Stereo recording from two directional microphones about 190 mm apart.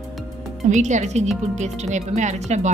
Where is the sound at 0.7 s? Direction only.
40° right (ahead or behind).